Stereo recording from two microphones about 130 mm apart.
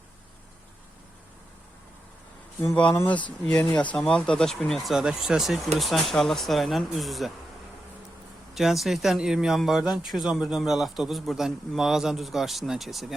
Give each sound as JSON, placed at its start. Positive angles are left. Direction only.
{"t": 2.9, "sound": "speech", "side_deg": 20}
{"t": 3.4, "sound": "a man's voice", "side_deg": 10}
{"t": 8.5, "sound": "a man's voice", "side_deg": 0}